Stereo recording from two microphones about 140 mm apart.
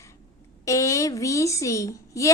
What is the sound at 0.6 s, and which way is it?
A woman's voice, 20° left (ahead or behind).